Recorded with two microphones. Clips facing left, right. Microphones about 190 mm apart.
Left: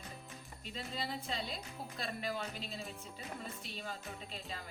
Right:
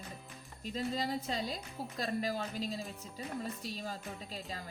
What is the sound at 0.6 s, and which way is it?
Speech, 40° right (ahead or behind).